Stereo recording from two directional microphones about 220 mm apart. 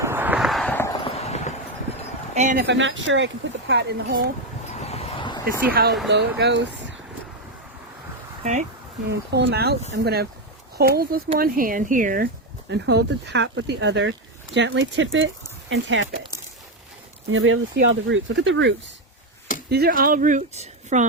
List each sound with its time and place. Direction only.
0.0 s a sound: 10° right (ahead or behind); by 0.9 s 10° left (ahead or behind)
0.9 s clip-clop: 25° left (ahead or behind)
2.3 s speech: 30° right (ahead or behind)
2.6 s speech: 55° right (ahead or behind)
4.8 s a sound: 30° left (ahead or behind)
5.5 s speech: 40° right (ahead or behind)
9.0 s speech: 50° right (ahead or behind)
17.3 s speech: 65° right (ahead or behind)
19.7 s speech: 45° right (ahead or behind)